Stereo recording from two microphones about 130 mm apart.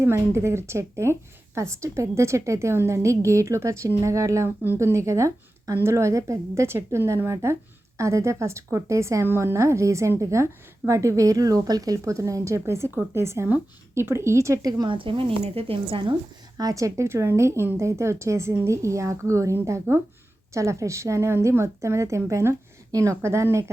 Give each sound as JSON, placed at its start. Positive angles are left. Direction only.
{"t": 0.0, "sound": "speech", "side_deg": -20}
{"t": 16.6, "sound": "speech", "side_deg": -25}